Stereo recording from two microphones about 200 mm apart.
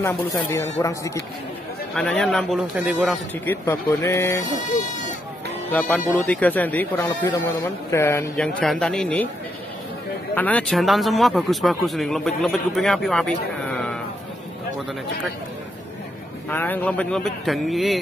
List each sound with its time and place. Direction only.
0.0 s speech: 15° left (ahead or behind)
2.0 s speech: 5° left (ahead or behind)
3.4 s speech: 15° left (ahead or behind)
5.7 s speech: 5° left (ahead or behind)
10.3 s speech: 5° left (ahead or behind)
16.4 s speech: 10° left (ahead or behind)